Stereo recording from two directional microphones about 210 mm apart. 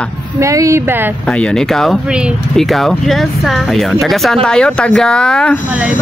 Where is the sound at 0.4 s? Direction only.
15° right (ahead or behind).